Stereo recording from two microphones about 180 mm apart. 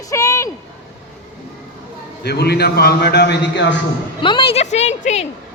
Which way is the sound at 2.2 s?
65° left (ahead or behind).